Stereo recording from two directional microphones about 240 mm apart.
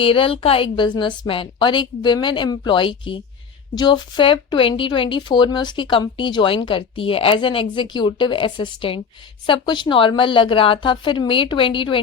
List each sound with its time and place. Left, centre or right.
0.0 s a woman's voice: left